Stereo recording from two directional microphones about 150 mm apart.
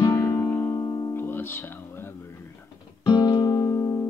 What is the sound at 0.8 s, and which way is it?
Music, 25° left (ahead or behind).